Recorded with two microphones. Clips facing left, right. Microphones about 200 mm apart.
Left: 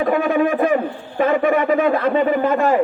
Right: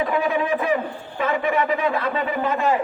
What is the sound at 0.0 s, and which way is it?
A man's voice, 50° left (ahead or behind).